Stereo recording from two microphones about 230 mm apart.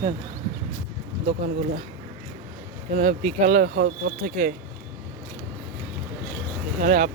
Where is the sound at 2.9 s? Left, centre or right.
Right.